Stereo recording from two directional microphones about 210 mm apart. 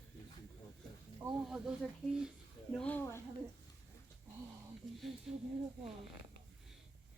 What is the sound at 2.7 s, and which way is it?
Speech, 5° left (ahead or behind).